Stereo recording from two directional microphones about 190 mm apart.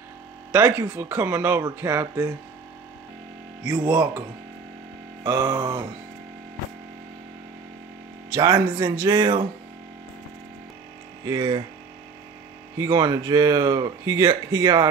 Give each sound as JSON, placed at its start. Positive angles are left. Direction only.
{"t": 0.5, "sound": "speech", "side_deg": -10}
{"t": 3.6, "sound": "speech", "side_deg": -20}
{"t": 3.9, "sound": "speech", "side_deg": -5}
{"t": 5.2, "sound": "speech", "side_deg": -20}
{"t": 8.3, "sound": "speech", "side_deg": -15}
{"t": 11.2, "sound": "speech", "side_deg": -25}
{"t": 12.7, "sound": "speech", "side_deg": -20}